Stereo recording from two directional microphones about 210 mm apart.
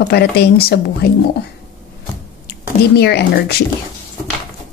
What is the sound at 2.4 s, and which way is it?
Speech, 50° left (ahead or behind).